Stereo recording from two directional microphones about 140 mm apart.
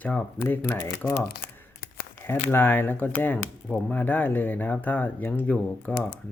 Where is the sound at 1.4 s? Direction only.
90° left.